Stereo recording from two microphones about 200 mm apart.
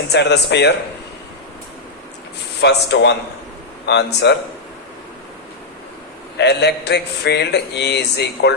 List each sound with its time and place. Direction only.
0.1 s speech: 60° left (ahead or behind)
2.6 s speech: 60° left (ahead or behind)
6.3 s speech: 55° left (ahead or behind)